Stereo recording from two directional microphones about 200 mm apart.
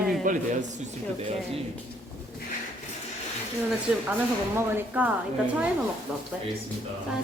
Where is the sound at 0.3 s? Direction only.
40° right (ahead or behind).